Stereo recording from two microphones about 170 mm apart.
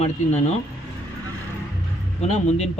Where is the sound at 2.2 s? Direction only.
40° left (ahead or behind).